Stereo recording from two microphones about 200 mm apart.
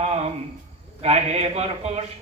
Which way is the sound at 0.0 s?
35° right (ahead or behind).